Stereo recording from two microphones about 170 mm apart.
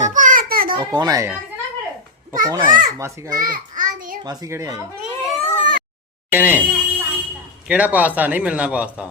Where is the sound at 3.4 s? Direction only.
50° right (ahead or behind).